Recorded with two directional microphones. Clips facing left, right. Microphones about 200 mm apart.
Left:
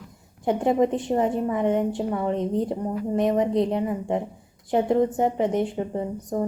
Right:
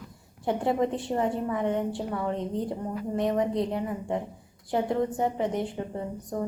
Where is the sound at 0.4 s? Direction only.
20° left (ahead or behind).